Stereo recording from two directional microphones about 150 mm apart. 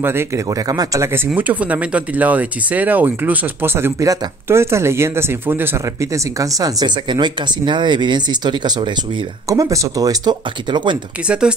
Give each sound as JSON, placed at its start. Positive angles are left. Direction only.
{"t": 0.0, "sound": "speech", "side_deg": -15}